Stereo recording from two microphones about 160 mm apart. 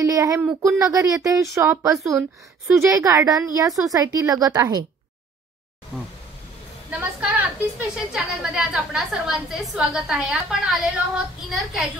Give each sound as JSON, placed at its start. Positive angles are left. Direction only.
{"t": 0.0, "sound": "a woman's voice", "side_deg": -20}
{"t": 6.9, "sound": "a sound", "side_deg": -10}
{"t": 7.9, "sound": "a woman's voice", "side_deg": -5}